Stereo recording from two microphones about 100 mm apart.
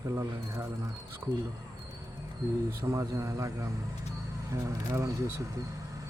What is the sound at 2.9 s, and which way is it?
Speech, 35° right (ahead or behind).